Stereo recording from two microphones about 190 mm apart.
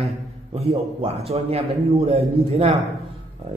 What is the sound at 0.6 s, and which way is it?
A man's voice, 30° right (ahead or behind).